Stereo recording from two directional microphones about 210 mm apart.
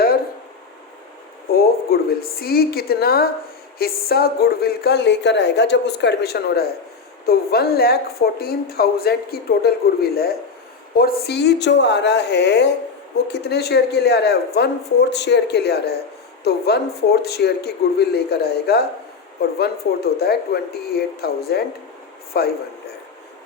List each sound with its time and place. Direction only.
1.5 s speech: 45° left (ahead or behind)